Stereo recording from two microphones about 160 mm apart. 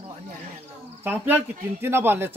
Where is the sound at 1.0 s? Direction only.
10° right (ahead or behind).